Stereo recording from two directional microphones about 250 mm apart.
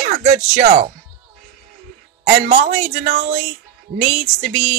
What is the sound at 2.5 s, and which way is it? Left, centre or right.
Speech, right.